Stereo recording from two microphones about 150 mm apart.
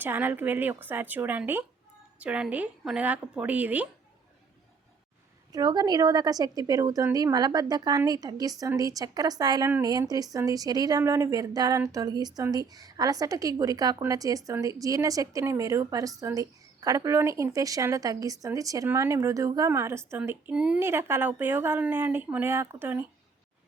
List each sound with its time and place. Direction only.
0.0 s a woman's voice: 10° right (ahead or behind)
5.5 s a woman's voice: 25° right (ahead or behind)